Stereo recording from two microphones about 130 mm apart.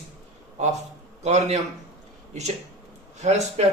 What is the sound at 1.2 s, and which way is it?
Speech, 60° right (ahead or behind).